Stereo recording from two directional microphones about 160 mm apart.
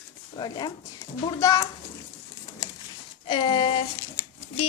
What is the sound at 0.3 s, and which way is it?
Speech, 25° left (ahead or behind).